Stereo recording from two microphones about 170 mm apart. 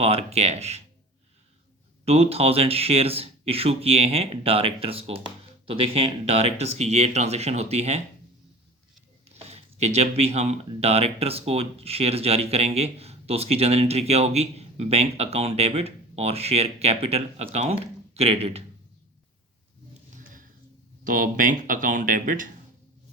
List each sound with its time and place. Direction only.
0.0 s speech: 35° right (ahead or behind)
2.0 s speech: 35° right (ahead or behind)
9.2 s speech: 40° right (ahead or behind)
21.0 s speech: 55° right (ahead or behind)